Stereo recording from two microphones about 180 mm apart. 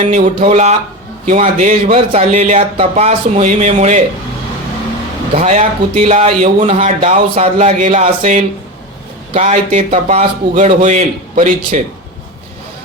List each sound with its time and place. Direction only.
0.0 s speech: 35° right (ahead or behind)
5.3 s speech: 35° right (ahead or behind)